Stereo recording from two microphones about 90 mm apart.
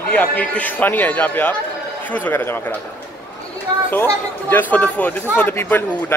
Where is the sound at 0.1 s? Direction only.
15° left (ahead or behind).